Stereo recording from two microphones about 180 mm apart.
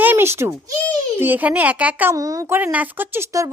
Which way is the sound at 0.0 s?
10° right (ahead or behind).